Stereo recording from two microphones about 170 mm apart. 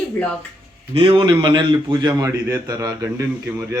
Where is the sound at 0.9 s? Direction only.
30° right (ahead or behind).